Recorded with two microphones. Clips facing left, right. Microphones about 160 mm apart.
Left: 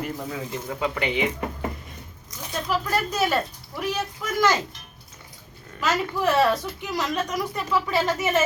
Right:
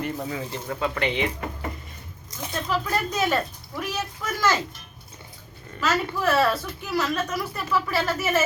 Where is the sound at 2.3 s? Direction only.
30° right (ahead or behind).